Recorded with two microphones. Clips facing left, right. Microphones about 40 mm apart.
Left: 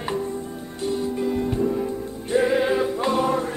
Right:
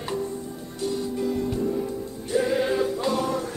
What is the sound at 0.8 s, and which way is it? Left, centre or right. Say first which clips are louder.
Music: left 2 dB; left.